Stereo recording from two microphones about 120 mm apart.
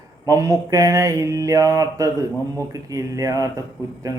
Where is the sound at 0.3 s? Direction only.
30° right (ahead or behind).